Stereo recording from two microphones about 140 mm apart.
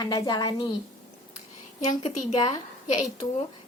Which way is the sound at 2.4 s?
30° left (ahead or behind).